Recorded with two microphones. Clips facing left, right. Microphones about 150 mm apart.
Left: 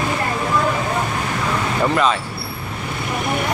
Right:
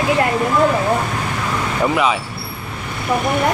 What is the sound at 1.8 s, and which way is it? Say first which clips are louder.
Speech: right 1 dB; 10° right (ahead or behind).